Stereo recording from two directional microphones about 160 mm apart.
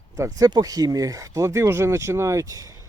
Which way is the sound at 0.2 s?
20° right (ahead or behind).